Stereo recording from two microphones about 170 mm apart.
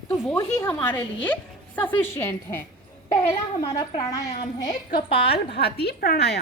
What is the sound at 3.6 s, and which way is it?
A woman's voice, 20° left (ahead or behind).